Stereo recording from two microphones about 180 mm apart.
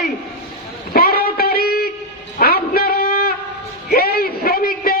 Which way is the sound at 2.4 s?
55° left (ahead or behind).